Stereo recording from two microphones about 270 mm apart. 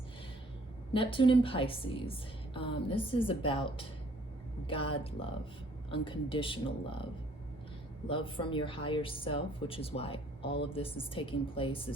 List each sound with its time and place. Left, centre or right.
0.9 s a woman's voice: centre
8.0 s a woman's voice: centre